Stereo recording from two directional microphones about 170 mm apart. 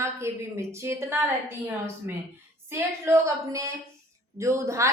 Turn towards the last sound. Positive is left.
turn(degrees=-15)  # may be behind; listen again after turning